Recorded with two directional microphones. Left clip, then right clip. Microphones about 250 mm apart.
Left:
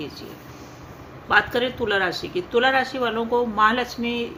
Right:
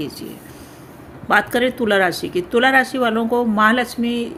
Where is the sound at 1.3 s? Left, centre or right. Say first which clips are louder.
Right 3 dB; right.